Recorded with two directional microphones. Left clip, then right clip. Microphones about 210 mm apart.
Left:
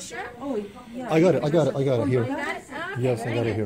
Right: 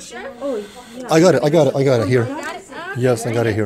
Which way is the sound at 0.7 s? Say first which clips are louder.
Right 9 dB; 35° right (ahead or behind).